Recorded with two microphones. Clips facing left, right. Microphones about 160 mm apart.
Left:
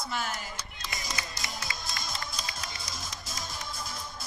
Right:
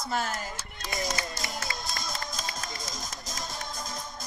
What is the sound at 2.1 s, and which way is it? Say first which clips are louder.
Music: right 2 dB; 45° right (ahead or behind).